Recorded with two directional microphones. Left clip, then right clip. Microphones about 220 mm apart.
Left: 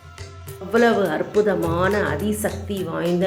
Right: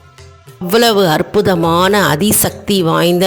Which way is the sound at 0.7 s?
45° right (ahead or behind).